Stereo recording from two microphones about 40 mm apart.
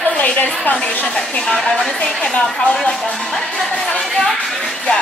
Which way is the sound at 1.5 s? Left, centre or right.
Centre.